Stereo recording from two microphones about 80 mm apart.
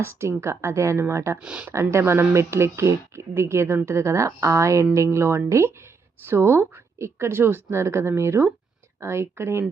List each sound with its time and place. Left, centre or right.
0.0 s speech: right
1.4 s speech: centre
1.7 s speech: right